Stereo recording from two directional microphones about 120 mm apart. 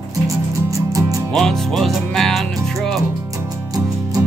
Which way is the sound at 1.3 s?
5° left (ahead or behind).